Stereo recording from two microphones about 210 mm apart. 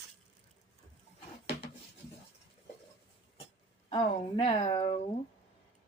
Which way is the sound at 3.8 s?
25° left (ahead or behind).